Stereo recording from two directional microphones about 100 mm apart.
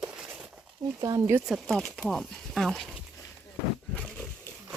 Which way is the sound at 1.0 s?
40° right (ahead or behind).